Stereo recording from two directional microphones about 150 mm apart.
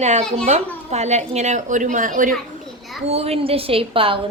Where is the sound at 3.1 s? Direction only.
40° right (ahead or behind).